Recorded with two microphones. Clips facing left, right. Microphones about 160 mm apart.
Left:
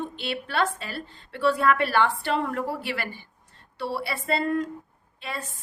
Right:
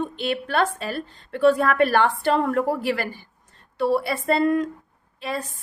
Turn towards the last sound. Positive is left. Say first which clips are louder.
# right 6 dB
turn(degrees=-40)  # may be behind; listen again after turning